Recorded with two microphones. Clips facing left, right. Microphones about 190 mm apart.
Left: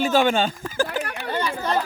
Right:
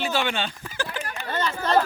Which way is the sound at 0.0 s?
45° left (ahead or behind).